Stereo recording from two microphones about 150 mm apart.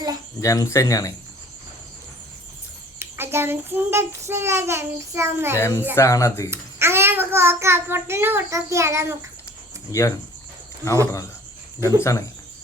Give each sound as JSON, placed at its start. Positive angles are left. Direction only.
{"t": 0.4, "sound": "speech", "side_deg": 20}
{"t": 3.0, "sound": "child singing", "side_deg": -15}
{"t": 5.5, "sound": "speech", "side_deg": 15}
{"t": 6.5, "sound": "a child's voice", "side_deg": -15}
{"t": 9.9, "sound": "speech", "side_deg": 20}